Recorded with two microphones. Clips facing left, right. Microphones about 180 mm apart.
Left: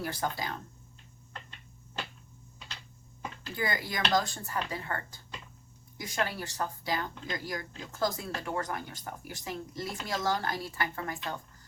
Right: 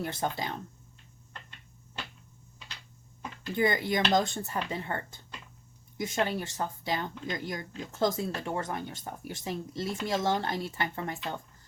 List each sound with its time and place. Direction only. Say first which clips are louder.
0.0 s speech: right 1 dB; 25° right (ahead or behind)
3.5 s speech: right 7 dB; 25° right (ahead or behind)